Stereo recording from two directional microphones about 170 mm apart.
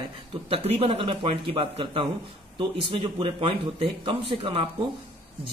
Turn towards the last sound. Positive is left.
turn(degrees=-30)  # may be behind; listen again after turning